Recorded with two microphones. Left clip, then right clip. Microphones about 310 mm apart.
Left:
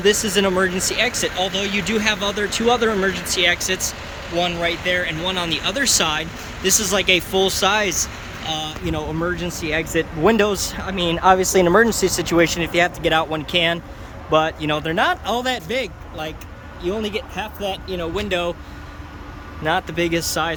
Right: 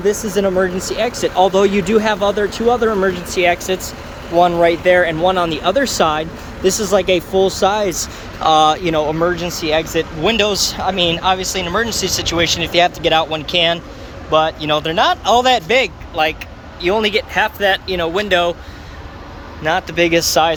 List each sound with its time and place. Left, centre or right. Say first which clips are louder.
0.0 s speech: right 1 dB; centre
11.2 s speech: left 2 dB; centre
19.6 s speech: right 5 dB; centre